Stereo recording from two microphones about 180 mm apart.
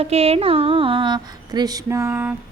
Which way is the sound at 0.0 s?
35° right (ahead or behind).